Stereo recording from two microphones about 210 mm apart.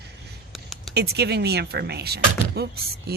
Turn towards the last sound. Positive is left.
turn(degrees=-50)  # may be behind; listen again after turning